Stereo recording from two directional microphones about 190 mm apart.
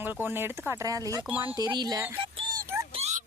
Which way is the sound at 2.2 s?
25° right (ahead or behind).